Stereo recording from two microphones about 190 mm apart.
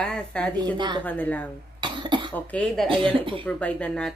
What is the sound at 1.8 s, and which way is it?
Cough, 25° right (ahead or behind).